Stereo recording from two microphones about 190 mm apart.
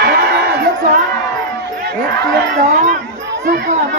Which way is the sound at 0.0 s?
55° right (ahead or behind).